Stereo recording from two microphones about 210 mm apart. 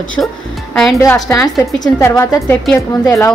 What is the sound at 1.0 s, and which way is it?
A woman's voice, 15° left (ahead or behind).